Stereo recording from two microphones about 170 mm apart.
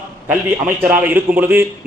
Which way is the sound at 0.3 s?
10° right (ahead or behind).